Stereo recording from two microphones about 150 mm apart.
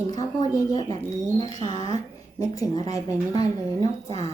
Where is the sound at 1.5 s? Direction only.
40° right (ahead or behind).